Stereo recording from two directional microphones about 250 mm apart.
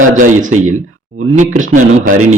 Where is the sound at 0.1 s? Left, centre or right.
Right.